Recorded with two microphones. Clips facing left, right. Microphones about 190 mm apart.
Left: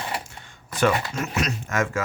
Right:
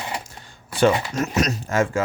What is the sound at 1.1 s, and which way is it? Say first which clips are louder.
Speech: right 5 dB; 40° right (ahead or behind).